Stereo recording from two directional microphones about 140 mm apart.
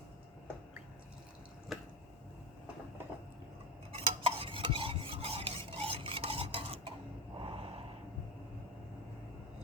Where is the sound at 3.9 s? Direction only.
40° right (ahead or behind).